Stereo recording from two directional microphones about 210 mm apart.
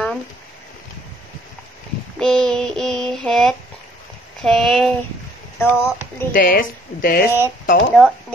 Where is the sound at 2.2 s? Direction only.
5° left (ahead or behind).